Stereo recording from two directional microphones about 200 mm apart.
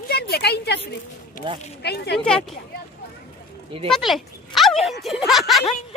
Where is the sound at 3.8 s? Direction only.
Centre (ahead or behind).